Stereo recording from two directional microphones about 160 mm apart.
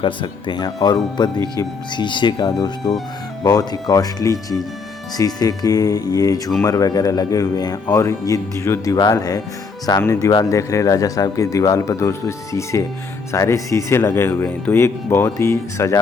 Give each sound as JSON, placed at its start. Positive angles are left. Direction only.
{"t": 0.0, "sound": "speech", "side_deg": 30}
{"t": 13.3, "sound": "speech", "side_deg": 20}